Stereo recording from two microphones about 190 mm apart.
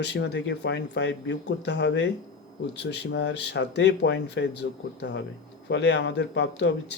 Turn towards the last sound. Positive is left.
turn(degrees=70)  # may be behind; listen again after turning